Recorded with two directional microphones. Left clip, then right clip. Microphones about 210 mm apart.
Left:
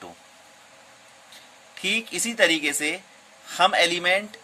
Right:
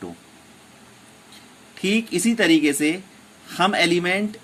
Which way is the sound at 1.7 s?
15° left (ahead or behind).